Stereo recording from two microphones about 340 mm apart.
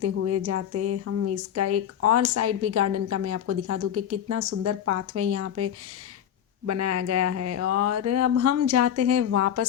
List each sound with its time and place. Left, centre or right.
0.0 s speech: right